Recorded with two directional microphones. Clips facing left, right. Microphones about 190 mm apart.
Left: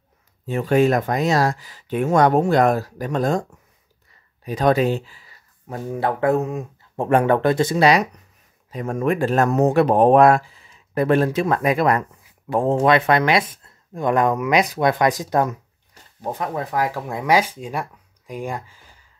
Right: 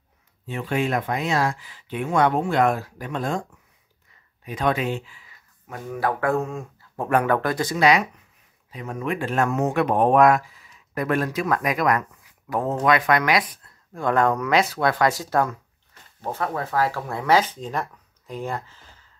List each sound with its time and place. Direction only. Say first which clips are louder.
0.5 s speech: left 7 dB; 40° left (ahead or behind)
4.5 s speech: left 6 dB; 35° left (ahead or behind)
8.6 s speech: left 7 dB; 45° left (ahead or behind); by 19.0 s 10° left (ahead or behind)